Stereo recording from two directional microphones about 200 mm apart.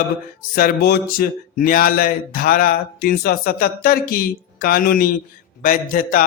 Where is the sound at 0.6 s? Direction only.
50° left (ahead or behind).